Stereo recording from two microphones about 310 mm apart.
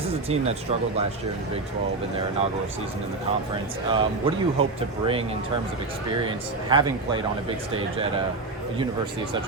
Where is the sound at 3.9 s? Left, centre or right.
Centre.